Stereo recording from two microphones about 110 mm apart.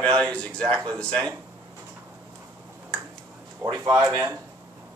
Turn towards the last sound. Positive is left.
turn(degrees=-30)  # may be behind; listen again after turning